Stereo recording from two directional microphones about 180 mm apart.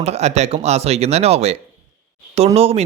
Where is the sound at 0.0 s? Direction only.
35° right (ahead or behind).